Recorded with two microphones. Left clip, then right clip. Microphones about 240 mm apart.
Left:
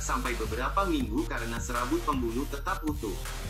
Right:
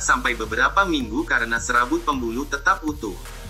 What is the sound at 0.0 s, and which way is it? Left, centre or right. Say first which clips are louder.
Speech: right 11 dB; right.